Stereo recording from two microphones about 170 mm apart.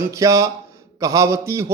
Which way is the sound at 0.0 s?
15° right (ahead or behind).